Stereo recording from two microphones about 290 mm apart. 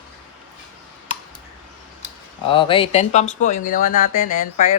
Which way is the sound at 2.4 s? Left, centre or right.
Centre.